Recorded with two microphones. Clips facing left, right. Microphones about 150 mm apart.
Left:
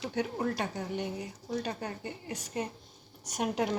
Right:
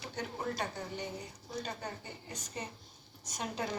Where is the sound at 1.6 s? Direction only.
65° left (ahead or behind).